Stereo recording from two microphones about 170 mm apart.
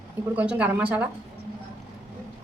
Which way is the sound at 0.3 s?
10° right (ahead or behind).